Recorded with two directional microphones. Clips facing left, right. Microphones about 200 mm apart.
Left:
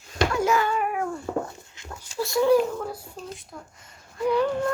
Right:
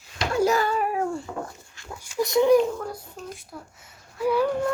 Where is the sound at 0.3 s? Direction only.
35° right (ahead or behind).